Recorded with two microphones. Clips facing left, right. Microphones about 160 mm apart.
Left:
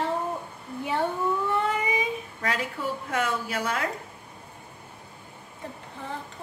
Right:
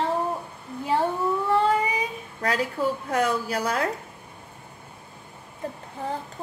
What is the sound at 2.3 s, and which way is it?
A woman's voice, 40° right (ahead or behind).